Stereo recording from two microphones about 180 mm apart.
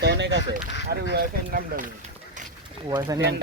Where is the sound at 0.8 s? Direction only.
65° right (ahead or behind).